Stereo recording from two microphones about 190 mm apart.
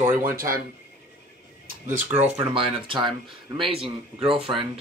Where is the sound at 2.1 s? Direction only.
35° right (ahead or behind).